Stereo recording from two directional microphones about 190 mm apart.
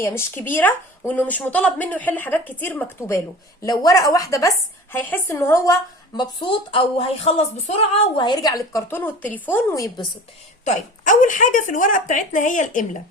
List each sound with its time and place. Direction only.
0.0 s speech: 10° left (ahead or behind)
6.1 s speech: 25° left (ahead or behind)
10.7 s a woman's voice: 40° left (ahead or behind)